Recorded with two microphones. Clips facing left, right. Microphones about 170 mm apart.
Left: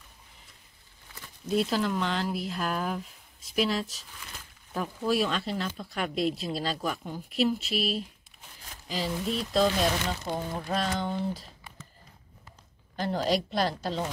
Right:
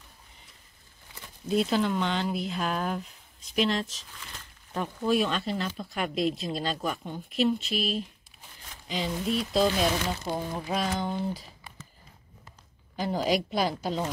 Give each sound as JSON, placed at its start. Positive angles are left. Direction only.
{"t": 1.5, "sound": "speech", "side_deg": 0}
{"t": 13.0, "sound": "speech", "side_deg": -5}